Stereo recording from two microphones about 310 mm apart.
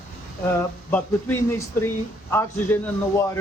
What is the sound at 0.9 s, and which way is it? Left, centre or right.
Speech, centre.